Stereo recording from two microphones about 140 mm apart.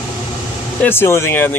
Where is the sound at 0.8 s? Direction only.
15° left (ahead or behind).